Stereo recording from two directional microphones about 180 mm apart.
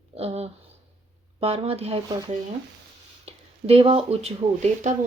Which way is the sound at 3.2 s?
35° right (ahead or behind).